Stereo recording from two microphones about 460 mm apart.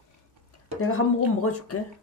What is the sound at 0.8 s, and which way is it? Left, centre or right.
Speech, left.